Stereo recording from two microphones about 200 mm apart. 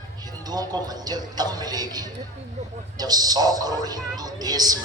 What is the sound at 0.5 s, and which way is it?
Speech, 20° right (ahead or behind).